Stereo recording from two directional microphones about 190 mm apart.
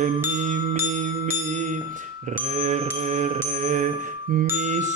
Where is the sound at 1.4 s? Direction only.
40° right (ahead or behind).